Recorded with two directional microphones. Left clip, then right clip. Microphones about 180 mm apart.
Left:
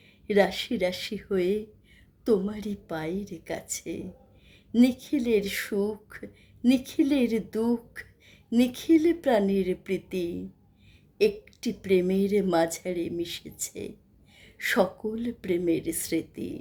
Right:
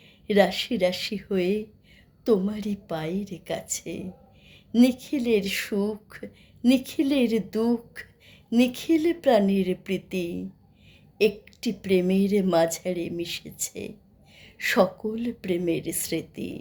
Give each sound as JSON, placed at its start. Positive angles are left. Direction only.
{"t": 0.3, "sound": "speech", "side_deg": 15}